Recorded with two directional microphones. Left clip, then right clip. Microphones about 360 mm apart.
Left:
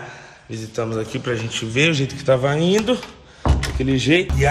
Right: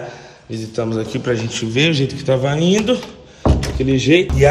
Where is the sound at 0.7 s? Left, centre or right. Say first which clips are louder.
Right 3 dB; centre.